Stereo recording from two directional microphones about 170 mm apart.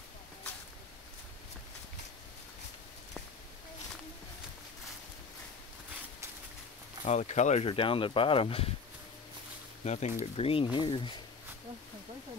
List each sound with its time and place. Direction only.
7.1 s speech: 40° left (ahead or behind)
9.8 s speech: 40° left (ahead or behind)